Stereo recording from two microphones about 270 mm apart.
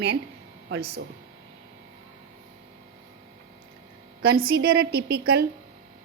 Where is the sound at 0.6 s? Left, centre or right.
Right.